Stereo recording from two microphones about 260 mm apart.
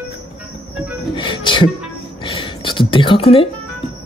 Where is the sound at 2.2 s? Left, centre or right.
Centre.